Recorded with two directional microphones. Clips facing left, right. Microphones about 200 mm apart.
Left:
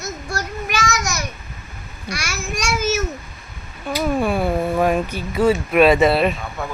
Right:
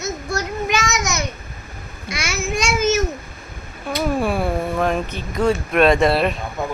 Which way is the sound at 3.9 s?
Centre (ahead or behind).